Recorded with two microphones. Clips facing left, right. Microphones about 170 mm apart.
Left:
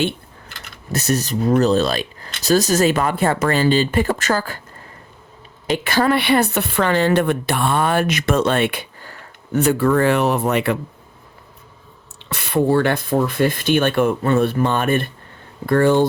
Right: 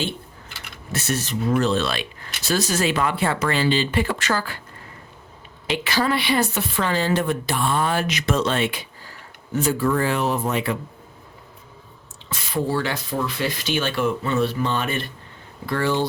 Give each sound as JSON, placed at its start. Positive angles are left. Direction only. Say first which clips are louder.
{"t": 0.9, "sound": "speech", "louder": "left 5 dB", "side_deg": 40}
{"t": 5.6, "sound": "speech", "louder": "left 5 dB", "side_deg": 50}
{"t": 12.2, "sound": "speech", "louder": "left 7 dB", "side_deg": 65}